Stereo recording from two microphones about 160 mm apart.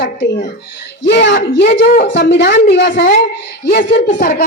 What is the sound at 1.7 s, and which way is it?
Speech, 80° left.